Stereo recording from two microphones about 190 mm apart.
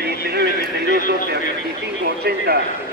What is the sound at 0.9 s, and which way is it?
A man's voice, 55° right (ahead or behind).